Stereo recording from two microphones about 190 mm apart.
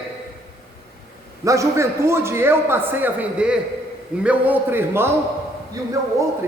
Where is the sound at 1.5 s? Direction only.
15° right (ahead or behind).